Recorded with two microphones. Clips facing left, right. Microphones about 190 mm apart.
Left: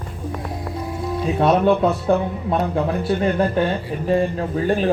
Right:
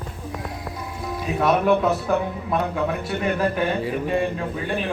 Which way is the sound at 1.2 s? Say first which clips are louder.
Left 3 dB; 30° left (ahead or behind).